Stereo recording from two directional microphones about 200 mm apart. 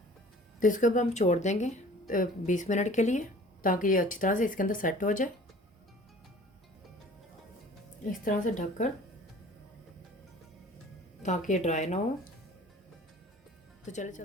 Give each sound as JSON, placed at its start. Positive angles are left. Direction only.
{"t": 0.6, "sound": "speech", "side_deg": 40}
{"t": 8.2, "sound": "speech", "side_deg": 40}
{"t": 11.2, "sound": "speech", "side_deg": 35}
{"t": 13.8, "sound": "speech", "side_deg": 35}